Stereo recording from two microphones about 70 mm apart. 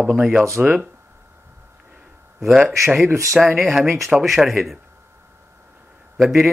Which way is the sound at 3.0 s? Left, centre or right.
Right.